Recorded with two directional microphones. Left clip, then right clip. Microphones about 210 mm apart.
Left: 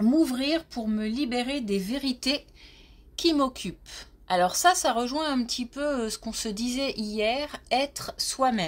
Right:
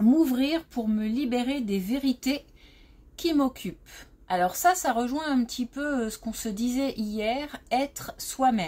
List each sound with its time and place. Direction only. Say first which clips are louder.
0.1 s a woman's voice: left 1 dB; 30° left (ahead or behind)